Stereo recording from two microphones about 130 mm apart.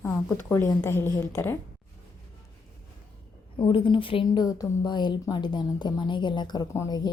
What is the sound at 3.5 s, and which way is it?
A woman's voice, 40° left (ahead or behind).